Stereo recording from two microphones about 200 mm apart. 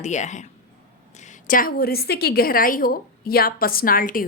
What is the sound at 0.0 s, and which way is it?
A woman's voice, 35° left (ahead or behind).